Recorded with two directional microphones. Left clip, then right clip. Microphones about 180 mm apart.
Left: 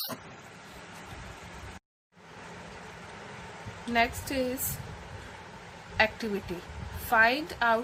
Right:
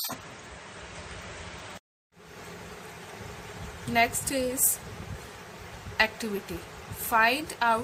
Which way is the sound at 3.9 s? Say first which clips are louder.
Right 2 dB; 25° left (ahead or behind).